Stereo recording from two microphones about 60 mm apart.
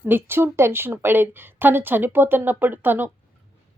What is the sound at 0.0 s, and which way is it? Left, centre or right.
A woman's voice, right.